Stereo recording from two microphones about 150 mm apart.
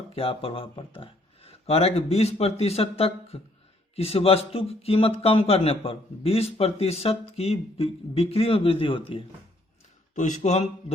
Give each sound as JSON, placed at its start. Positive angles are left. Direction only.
{"t": 0.1, "sound": "a man's voice", "side_deg": 40}
{"t": 10.2, "sound": "speech", "side_deg": 55}